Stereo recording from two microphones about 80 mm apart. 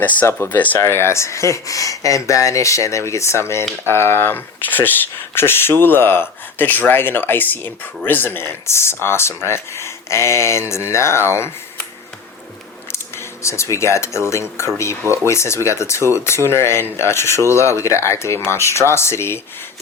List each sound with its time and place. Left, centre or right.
0.0 s speech: left
0.8 s speech: left
13.4 s speech: left